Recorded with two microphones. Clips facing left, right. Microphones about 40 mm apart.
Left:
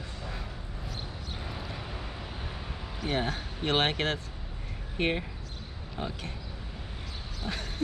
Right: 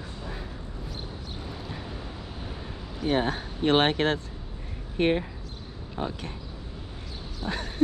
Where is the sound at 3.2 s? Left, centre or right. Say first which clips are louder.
Right 5 dB; right.